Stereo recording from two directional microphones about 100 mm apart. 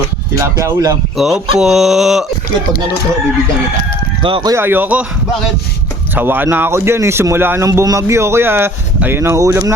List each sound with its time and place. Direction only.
0.3 s speech: 30° right (ahead or behind)
1.1 s a sound: centre (ahead or behind)
4.2 s speech: 60° right (ahead or behind)
4.5 s speech: 20° right (ahead or behind)
6.1 s speech: 20° right (ahead or behind)
7.7 s speech: 35° right (ahead or behind)